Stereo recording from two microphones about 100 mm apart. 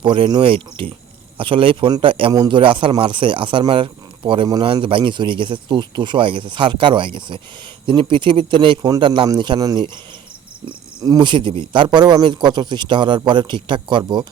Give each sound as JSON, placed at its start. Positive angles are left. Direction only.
{"t": 0.0, "sound": "speech", "side_deg": -60}
{"t": 2.3, "sound": "a man's voice", "side_deg": -40}
{"t": 2.6, "sound": "speech", "side_deg": -60}
{"t": 9.6, "sound": "a man's voice", "side_deg": -35}
{"t": 11.2, "sound": "speech", "side_deg": -50}